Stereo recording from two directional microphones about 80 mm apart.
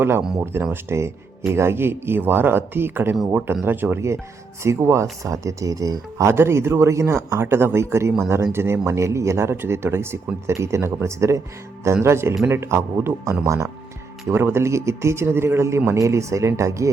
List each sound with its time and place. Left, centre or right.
0.6 s speech: right